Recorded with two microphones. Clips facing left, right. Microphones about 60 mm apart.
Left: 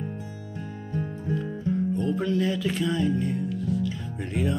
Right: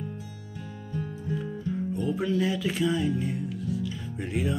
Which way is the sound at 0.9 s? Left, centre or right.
Left.